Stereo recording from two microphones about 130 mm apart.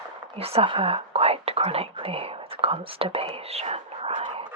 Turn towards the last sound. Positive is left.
turn(degrees=-50)  # may be behind; listen again after turning